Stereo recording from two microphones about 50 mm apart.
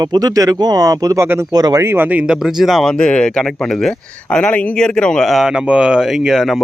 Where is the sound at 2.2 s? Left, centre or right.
Centre.